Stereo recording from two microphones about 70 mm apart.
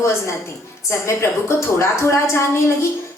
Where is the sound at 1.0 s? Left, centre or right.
Left.